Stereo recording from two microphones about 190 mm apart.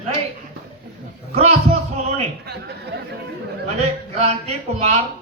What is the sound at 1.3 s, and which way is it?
Speech, 35° right (ahead or behind).